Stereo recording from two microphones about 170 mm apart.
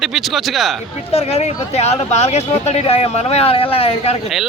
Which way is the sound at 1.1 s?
35° left (ahead or behind).